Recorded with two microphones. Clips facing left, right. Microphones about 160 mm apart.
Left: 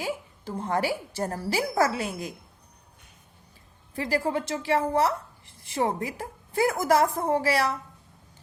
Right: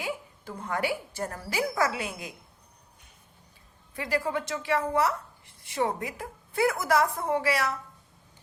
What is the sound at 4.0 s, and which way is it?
A woman's voice, 35° left (ahead or behind).